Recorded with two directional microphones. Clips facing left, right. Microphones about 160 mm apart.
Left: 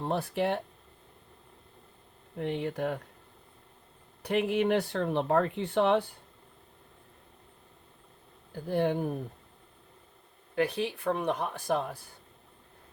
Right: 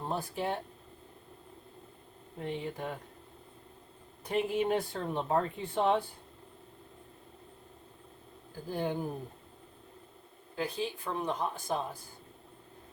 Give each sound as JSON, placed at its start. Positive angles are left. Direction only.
{"t": 0.1, "sound": "speech", "side_deg": 70}
{"t": 2.4, "sound": "speech", "side_deg": 70}
{"t": 4.2, "sound": "speech", "side_deg": 70}
{"t": 8.6, "sound": "speech", "side_deg": 65}
{"t": 10.5, "sound": "speech", "side_deg": 65}